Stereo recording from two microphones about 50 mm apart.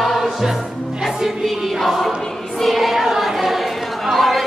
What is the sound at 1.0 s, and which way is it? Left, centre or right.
Music, centre.